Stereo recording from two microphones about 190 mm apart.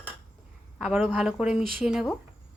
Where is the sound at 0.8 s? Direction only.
5° right (ahead or behind).